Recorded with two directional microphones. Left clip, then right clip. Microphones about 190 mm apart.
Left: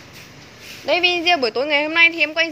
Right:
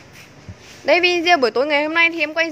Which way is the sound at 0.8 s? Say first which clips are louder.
Right 2 dB; 35° right (ahead or behind).